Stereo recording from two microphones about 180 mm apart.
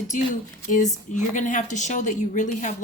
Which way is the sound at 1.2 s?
45° left (ahead or behind).